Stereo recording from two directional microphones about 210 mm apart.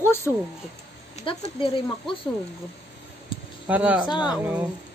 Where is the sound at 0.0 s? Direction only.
10° left (ahead or behind).